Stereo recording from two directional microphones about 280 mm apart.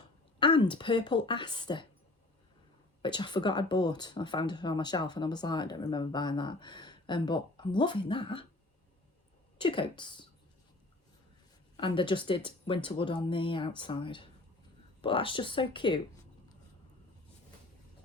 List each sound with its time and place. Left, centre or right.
0.3 s speech: centre
3.0 s speech: centre
9.6 s speech: centre
11.8 s speech: centre